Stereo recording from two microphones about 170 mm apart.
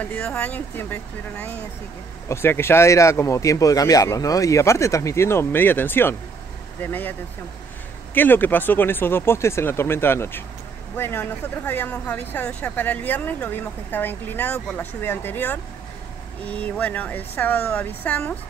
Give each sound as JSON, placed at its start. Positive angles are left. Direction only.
{"t": 0.0, "sound": "speech", "side_deg": 10}